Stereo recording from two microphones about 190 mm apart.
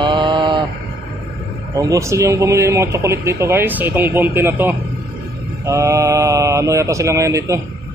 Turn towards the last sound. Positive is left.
turn(degrees=-15)  # may be behind; listen again after turning